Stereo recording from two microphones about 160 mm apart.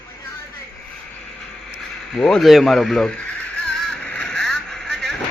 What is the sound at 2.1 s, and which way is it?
A man's voice, centre (ahead or behind).